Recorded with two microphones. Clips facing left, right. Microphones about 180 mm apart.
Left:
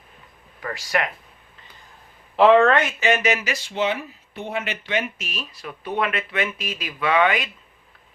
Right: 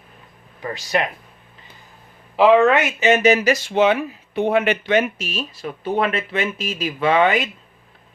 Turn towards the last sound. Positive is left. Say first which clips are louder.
# right 3 dB
turn(degrees=-25)  # may be behind; listen again after turning